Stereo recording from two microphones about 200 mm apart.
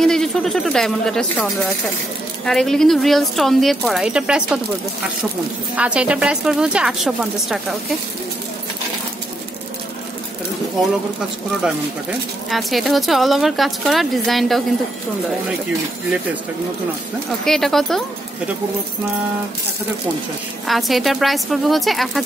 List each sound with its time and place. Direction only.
0.0 s speech: centre (ahead or behind)
5.8 s speech: 5° right (ahead or behind)
12.4 s speech: centre (ahead or behind)
17.5 s speech: centre (ahead or behind)
20.6 s speech: centre (ahead or behind)